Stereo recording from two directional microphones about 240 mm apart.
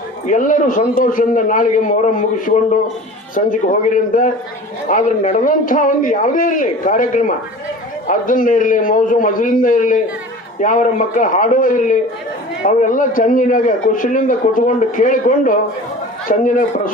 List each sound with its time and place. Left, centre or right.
0.3 s a man's voice: left
3.3 s a man's voice: left